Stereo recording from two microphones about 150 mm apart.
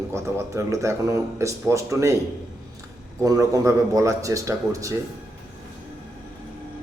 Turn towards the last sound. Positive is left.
turn(degrees=-20)  # may be behind; listen again after turning